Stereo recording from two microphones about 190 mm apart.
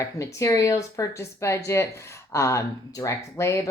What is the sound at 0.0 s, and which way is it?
A woman's voice, 15° left (ahead or behind).